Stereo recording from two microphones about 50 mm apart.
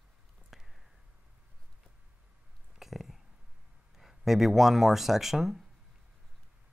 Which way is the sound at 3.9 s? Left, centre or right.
Centre.